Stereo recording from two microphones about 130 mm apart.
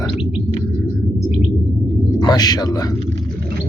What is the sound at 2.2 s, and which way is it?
Speech, 30° left (ahead or behind).